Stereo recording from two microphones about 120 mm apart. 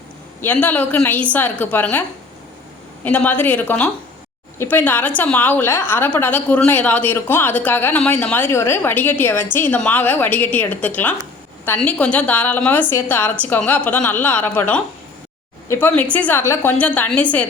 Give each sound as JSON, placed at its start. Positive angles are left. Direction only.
{"t": 0.4, "sound": "a woman's voice", "side_deg": 15}
{"t": 16.4, "sound": "a woman's voice", "side_deg": 25}
{"t": 16.7, "sound": "a woman's voice", "side_deg": 15}